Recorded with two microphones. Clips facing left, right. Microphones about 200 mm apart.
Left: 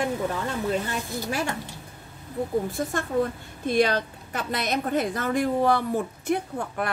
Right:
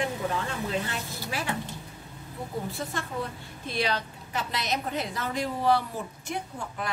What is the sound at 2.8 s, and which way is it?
A woman's voice, 50° left (ahead or behind).